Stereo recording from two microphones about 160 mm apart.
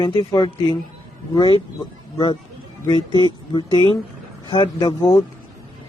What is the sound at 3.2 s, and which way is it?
Speech, 30° left (ahead or behind).